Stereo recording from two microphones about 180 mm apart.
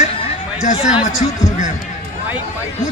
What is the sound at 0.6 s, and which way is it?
Speech, 40° left (ahead or behind).